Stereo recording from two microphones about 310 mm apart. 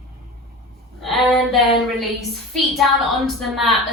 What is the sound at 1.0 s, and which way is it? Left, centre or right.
A woman's voice, centre.